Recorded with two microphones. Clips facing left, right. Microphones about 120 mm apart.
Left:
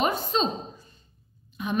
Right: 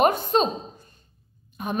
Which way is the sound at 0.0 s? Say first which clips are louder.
Right 5 dB; 50° right (ahead or behind).